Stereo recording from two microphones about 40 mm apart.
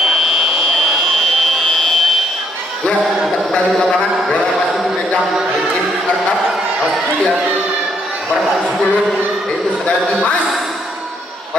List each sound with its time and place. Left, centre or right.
0.0 s buzzer: centre
3.6 s a sound: centre
9.8 s speech: left